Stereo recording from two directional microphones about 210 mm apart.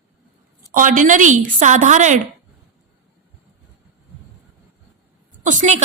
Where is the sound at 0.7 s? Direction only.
40° right (ahead or behind).